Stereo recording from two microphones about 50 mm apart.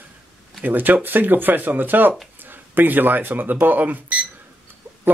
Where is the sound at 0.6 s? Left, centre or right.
Right.